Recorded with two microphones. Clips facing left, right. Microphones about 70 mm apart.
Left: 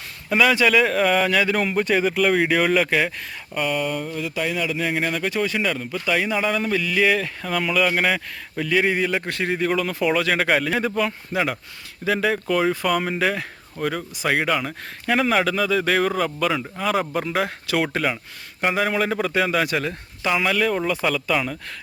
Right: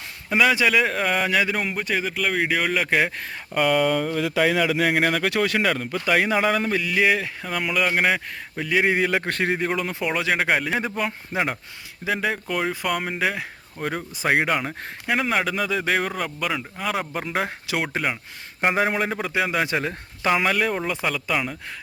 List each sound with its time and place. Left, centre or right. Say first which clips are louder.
0.3 s a man's voice: left 2 dB; centre
3.5 s speech: right 4 dB; right
6.6 s a man's voice: left 1 dB; right
9.0 s speech: right 1 dB; right
9.7 s a man's voice: left 4 dB; centre
12.0 s a man's voice: left 4 dB; centre
14.2 s speech: right 1 dB; right
15.0 s a man's voice: left 3 dB; centre
17.2 s a man's voice: left 3 dB; centre
18.6 s speech: right 1 dB; right
18.9 s a man's voice: left 2 dB; centre
19.6 s speech: left 1 dB; right
20.7 s a man's voice: left 3 dB; centre